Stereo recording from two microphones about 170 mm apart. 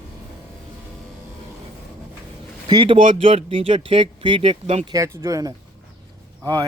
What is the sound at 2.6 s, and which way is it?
Speech, 30° right (ahead or behind).